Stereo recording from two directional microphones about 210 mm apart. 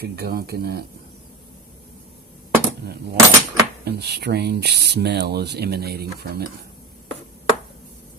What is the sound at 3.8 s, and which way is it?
Speech, 50° right (ahead or behind).